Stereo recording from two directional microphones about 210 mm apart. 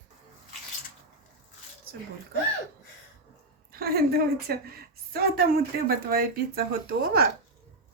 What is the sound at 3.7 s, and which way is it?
Speech, 45° right (ahead or behind).